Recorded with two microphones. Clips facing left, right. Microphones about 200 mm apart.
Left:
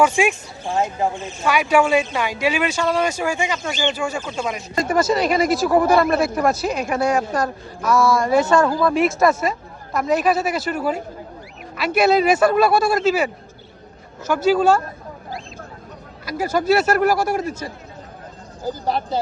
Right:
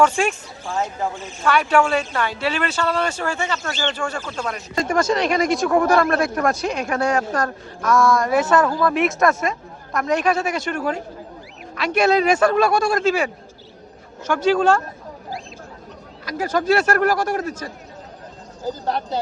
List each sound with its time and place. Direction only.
0.0 s speech: 10° left (ahead or behind)
1.5 s speech: 10° left (ahead or behind)
16.2 s speech: 10° left (ahead or behind)